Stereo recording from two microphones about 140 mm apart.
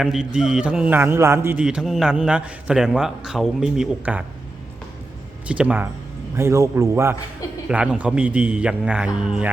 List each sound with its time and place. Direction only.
0.0 s a man's voice: 5° right (ahead or behind)
1.6 s a man's voice: 5° right (ahead or behind)
5.5 s a man's voice: 10° right (ahead or behind)